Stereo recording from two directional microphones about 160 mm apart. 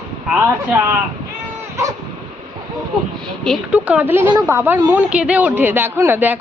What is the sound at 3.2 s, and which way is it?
Speech, 5° left (ahead or behind).